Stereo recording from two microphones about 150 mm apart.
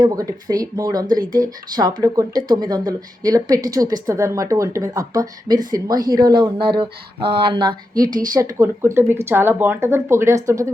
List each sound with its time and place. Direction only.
0.0 s speech: 25° right (ahead or behind)